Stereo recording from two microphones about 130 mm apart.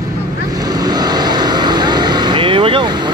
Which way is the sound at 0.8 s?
30° right (ahead or behind).